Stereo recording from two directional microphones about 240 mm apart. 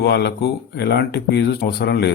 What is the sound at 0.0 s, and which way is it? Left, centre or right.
Speech, left.